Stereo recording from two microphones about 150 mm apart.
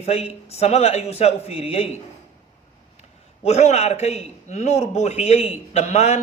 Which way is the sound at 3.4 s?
45° left (ahead or behind).